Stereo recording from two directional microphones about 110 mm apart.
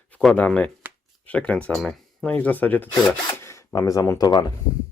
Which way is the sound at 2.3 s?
15° left (ahead or behind).